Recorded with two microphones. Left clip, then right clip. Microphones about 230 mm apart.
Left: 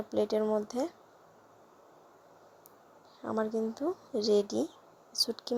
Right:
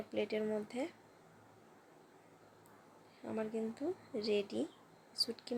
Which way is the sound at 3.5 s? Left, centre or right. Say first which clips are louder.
Left 7 dB; left.